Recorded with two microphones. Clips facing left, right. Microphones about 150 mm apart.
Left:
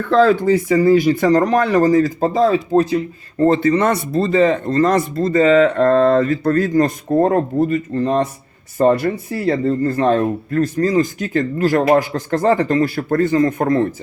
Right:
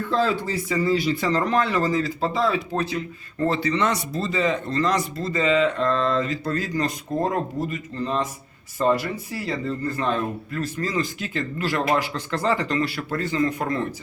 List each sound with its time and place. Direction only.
0.0 s speech: 70° left (ahead or behind)
0.3 s speech: 50° left (ahead or behind)